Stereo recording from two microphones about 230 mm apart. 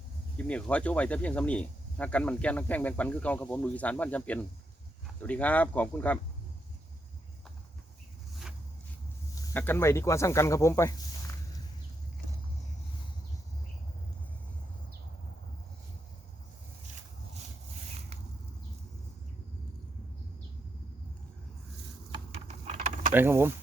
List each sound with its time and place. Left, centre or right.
0.3 s speech: centre
9.3 s speech: centre
22.1 s typing: right
23.1 s speech: centre